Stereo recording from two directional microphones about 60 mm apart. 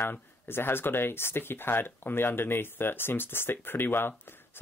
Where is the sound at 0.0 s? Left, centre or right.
Left.